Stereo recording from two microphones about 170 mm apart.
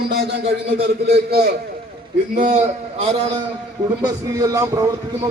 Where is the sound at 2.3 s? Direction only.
45° right (ahead or behind).